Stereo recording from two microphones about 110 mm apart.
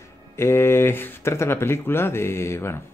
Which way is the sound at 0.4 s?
25° left (ahead or behind).